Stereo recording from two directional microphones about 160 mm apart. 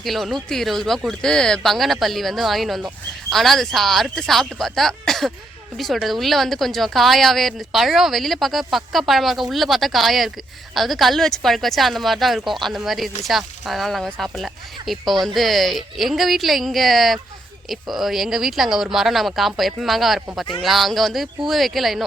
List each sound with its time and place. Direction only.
0.0 s speech: centre (ahead or behind)